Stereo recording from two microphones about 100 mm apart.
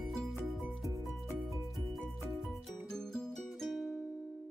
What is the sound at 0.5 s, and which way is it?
Music, 5° right (ahead or behind).